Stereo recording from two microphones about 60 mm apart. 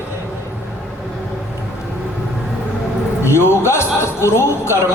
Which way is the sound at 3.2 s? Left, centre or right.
Left.